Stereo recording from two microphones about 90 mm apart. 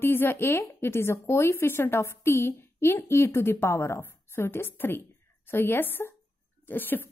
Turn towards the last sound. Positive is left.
turn(degrees=20)  # may be behind; listen again after turning